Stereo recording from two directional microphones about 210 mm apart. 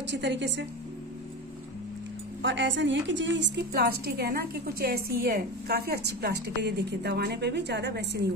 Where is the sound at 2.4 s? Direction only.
60° right (ahead or behind).